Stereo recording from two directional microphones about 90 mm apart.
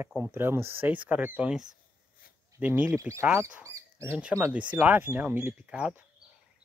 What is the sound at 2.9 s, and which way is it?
Speech, 30° right (ahead or behind).